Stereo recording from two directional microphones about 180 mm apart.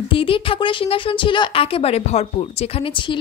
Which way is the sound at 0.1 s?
30° left (ahead or behind).